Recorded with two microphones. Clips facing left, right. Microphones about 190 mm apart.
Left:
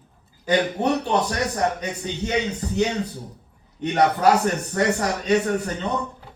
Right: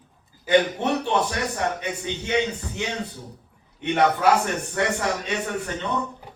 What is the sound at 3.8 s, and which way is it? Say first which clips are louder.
Speech: left 1 dB; 40° left (ahead or behind).